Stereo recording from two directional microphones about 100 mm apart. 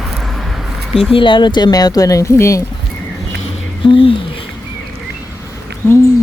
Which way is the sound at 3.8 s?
60° left (ahead or behind).